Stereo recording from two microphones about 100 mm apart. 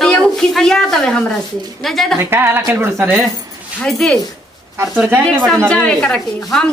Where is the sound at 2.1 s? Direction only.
20° right (ahead or behind).